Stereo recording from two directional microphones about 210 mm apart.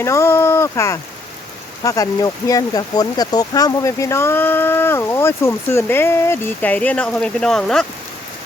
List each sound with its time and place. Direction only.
0.0 s speech: 15° left (ahead or behind)